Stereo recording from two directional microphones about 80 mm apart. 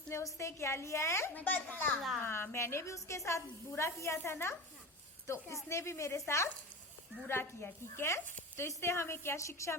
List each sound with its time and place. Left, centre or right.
0.1 s speech: left
1.3 s a child's voice: left